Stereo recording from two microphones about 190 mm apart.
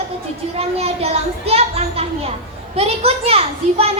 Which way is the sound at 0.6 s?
35° right (ahead or behind).